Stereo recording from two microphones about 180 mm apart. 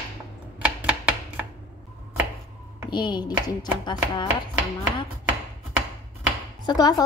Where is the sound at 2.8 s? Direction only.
25° left (ahead or behind).